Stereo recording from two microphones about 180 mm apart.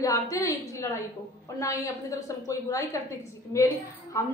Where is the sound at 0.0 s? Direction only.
20° left (ahead or behind).